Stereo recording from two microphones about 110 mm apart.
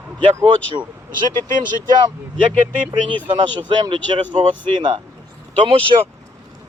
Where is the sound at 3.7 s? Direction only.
45° right (ahead or behind).